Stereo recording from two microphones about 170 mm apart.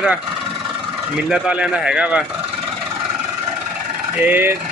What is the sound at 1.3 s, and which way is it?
Speech, 5° right (ahead or behind).